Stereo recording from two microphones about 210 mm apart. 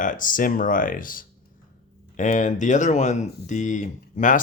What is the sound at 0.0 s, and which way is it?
Speech, 40° left (ahead or behind).